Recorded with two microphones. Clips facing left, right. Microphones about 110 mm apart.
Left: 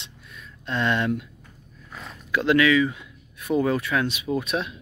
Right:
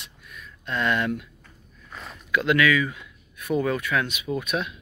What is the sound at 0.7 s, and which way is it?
Speech, 30° left (ahead or behind).